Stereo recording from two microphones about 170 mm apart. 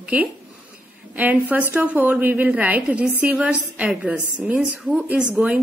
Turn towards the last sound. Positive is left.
turn(degrees=-5)  # may be behind; listen again after turning